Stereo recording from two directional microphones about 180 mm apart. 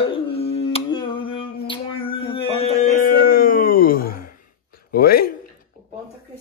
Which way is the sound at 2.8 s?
50° left (ahead or behind).